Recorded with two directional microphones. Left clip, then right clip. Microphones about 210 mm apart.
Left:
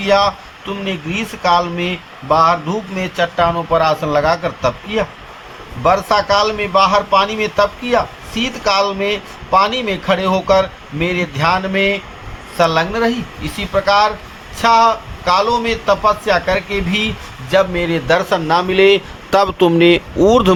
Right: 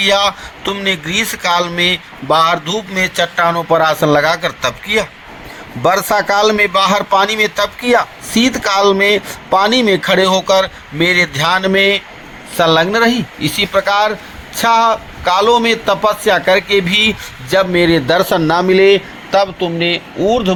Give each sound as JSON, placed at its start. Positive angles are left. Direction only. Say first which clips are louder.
{"t": 0.0, "sound": "a man's voice", "louder": "right 1 dB", "side_deg": -40}
{"t": 19.3, "sound": "speech", "louder": "even", "side_deg": 55}
{"t": 20.1, "sound": "speech", "louder": "even", "side_deg": 25}